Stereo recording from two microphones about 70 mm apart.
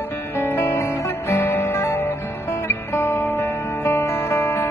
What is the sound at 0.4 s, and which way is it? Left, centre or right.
Music, left.